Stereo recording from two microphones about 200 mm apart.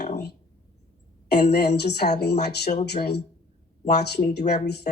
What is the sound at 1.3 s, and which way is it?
Speech, 55° left (ahead or behind).